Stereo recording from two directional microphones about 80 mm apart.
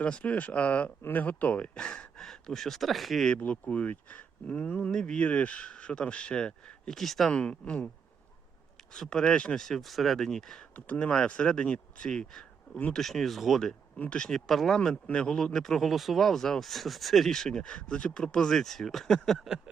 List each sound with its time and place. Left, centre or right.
0.0 s speech: centre
3.3 s speech: centre
4.9 s speech: centre
7.3 s speech: centre
8.9 s speech: centre
10.8 s speech: centre
14.8 s speech: centre